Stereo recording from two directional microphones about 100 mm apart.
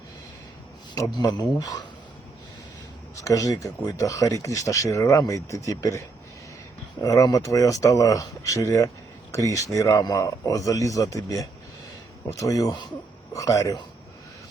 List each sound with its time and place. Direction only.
1.2 s speech: 40° left (ahead or behind)
3.2 s speech: 35° left (ahead or behind)